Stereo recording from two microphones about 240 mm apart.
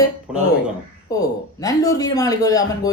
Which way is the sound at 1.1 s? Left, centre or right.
Centre.